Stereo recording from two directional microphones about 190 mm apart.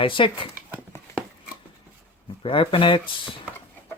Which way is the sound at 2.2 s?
30° left (ahead or behind).